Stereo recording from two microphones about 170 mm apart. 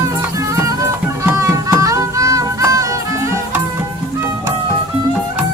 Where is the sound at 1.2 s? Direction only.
15° right (ahead or behind).